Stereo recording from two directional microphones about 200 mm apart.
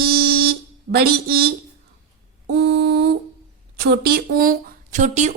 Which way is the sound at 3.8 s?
50° right (ahead or behind).